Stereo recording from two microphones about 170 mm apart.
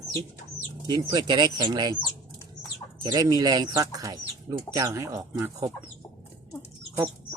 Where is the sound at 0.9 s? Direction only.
25° right (ahead or behind).